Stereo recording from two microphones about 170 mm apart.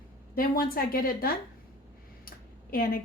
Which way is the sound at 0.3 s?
55° left (ahead or behind).